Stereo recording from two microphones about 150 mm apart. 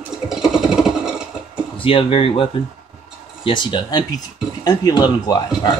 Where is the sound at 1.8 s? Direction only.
35° left (ahead or behind).